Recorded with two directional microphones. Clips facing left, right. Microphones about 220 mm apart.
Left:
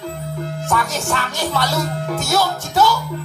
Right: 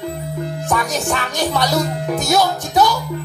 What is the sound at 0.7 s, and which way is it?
Speech, 15° right (ahead or behind).